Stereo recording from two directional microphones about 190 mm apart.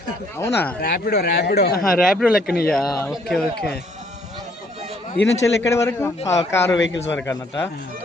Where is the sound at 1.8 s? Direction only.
Centre (ahead or behind).